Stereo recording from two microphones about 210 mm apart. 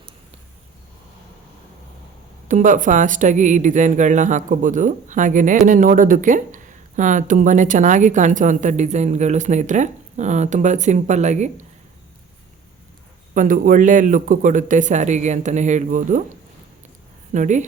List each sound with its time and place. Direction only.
2.5 s speech: 35° right (ahead or behind)
13.3 s speech: 40° right (ahead or behind)
17.3 s speech: 35° right (ahead or behind)